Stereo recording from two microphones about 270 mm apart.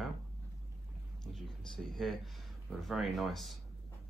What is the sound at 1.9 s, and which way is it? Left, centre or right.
Speech, centre.